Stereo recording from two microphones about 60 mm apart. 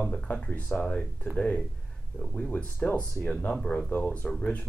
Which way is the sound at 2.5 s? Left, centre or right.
Left.